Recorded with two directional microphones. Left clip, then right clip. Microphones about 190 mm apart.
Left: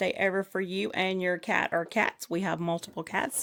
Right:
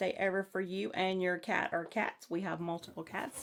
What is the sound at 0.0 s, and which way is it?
Speech, 45° left (ahead or behind).